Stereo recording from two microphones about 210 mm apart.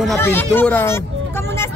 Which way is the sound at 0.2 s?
10° left (ahead or behind).